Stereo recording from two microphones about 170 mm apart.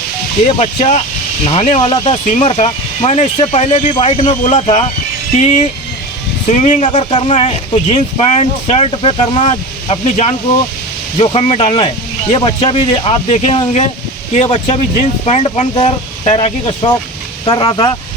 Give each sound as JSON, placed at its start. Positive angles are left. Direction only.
{"t": 0.4, "sound": "speech", "side_deg": 40}